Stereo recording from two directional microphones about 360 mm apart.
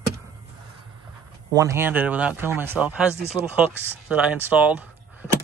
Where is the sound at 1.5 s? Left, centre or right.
Centre.